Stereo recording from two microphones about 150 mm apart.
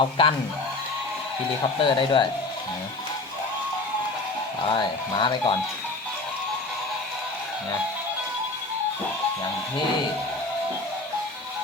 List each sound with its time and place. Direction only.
0.0 s speech: 35° left (ahead or behind)
1.8 s speech: 30° left (ahead or behind)
4.7 s speech: 35° left (ahead or behind)